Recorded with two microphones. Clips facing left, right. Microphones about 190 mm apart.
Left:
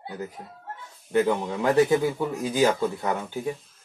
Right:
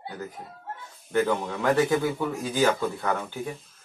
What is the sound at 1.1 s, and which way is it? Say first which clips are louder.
Speech: left 2 dB; 15° left (ahead or behind).